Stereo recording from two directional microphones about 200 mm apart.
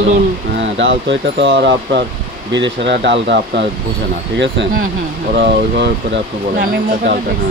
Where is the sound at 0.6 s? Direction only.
65° right (ahead or behind).